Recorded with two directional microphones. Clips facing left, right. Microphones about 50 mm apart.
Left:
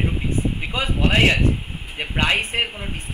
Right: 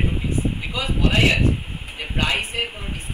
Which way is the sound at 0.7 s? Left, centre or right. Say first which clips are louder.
Left 2 dB; left.